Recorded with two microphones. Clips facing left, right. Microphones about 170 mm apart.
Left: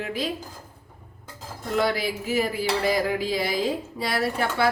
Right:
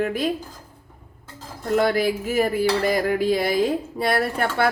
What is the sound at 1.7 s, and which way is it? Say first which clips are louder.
Speech: right 5 dB; 50° right (ahead or behind).